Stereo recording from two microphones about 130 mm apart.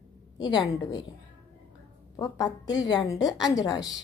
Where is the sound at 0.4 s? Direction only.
35° left (ahead or behind).